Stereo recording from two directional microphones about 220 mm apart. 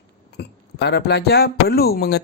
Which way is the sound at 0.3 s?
50° left (ahead or behind).